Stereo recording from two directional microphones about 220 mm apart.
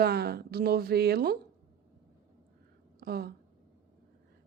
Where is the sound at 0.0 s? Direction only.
45° right (ahead or behind).